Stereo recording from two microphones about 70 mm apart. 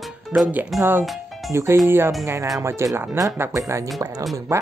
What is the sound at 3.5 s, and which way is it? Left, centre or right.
Speech, right.